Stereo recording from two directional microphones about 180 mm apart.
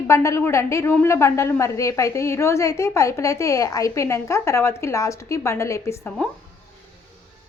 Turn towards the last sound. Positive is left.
turn(degrees=10)  # may be behind; listen again after turning